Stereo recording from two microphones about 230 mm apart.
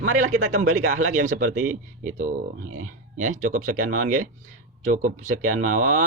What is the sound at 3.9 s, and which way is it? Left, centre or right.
Speech, right.